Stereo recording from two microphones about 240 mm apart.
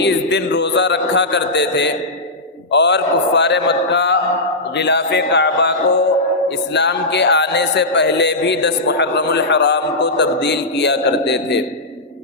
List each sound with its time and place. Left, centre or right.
0.0 s speech: left
6.7 s speech: left